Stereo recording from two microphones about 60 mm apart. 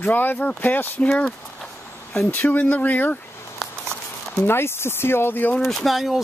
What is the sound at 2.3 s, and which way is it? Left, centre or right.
Speech, left.